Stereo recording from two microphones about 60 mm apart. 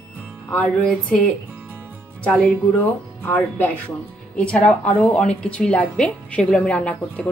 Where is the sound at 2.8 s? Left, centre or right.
Left.